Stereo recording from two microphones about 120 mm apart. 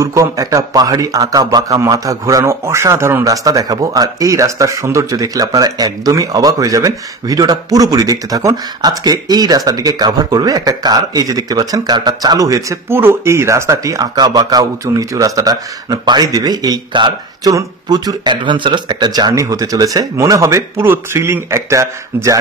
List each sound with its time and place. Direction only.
0.0 s a man's voice: 25° right (ahead or behind)
3.4 s speech: 30° right (ahead or behind)